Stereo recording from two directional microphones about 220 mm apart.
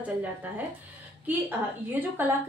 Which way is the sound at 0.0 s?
5° right (ahead or behind).